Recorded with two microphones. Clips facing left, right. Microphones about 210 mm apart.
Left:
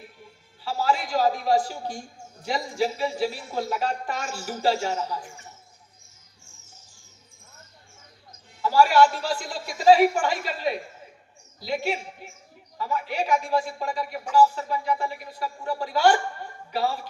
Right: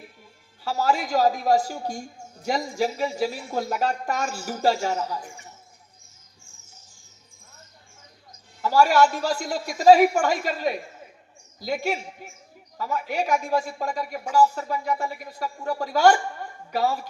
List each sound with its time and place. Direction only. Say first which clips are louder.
0.6 s speech: right 1 dB; 45° right (ahead or behind)
8.7 s speech: even; 45° right (ahead or behind)